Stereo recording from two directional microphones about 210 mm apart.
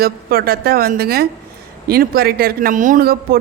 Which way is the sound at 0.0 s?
45° right (ahead or behind).